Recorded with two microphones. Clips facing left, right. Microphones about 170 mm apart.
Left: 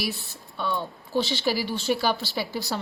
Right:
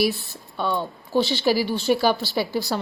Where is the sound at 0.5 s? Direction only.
50° right (ahead or behind).